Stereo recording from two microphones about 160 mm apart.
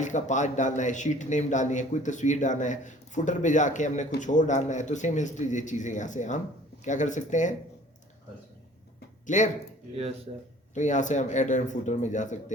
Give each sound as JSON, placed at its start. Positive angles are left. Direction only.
{"t": 0.0, "sound": "speech", "side_deg": 50}
{"t": 9.2, "sound": "speech", "side_deg": 50}
{"t": 10.3, "sound": "a man's voice", "side_deg": -45}
{"t": 10.8, "sound": "speech", "side_deg": 50}